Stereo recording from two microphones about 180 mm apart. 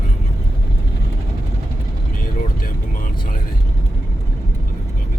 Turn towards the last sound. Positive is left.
turn(degrees=50)  # may be behind; listen again after turning